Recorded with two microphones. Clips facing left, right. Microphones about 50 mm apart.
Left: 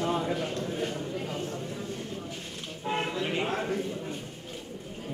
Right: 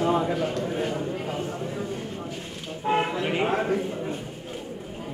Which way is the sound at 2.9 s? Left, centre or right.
Centre.